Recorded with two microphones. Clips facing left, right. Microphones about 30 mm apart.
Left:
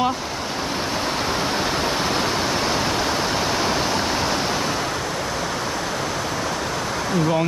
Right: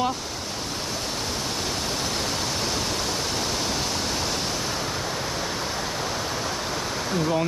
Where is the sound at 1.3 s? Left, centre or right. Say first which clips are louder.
Left 7 dB; left.